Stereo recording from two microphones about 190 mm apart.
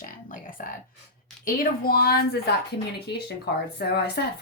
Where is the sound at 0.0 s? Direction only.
45° left (ahead or behind).